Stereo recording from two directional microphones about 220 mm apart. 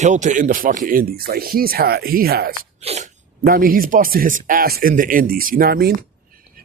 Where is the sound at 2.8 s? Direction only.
30° right (ahead or behind).